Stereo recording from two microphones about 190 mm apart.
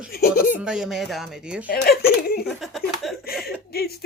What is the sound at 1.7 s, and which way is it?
Speech, 55° left (ahead or behind).